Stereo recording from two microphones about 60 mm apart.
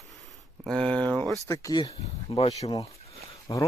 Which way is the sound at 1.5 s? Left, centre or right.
Left.